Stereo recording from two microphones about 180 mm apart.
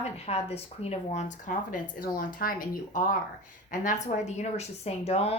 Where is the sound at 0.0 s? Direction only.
35° left (ahead or behind).